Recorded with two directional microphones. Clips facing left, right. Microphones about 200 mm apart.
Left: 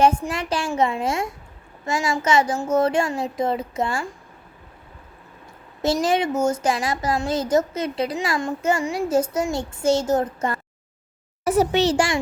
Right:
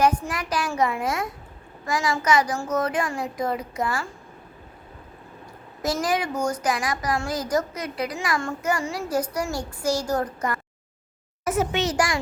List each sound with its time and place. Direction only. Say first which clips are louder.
0.0 s a child's voice: left 3 dB; 25° left (ahead or behind)
5.8 s a child's voice: left 4 dB; 25° left (ahead or behind)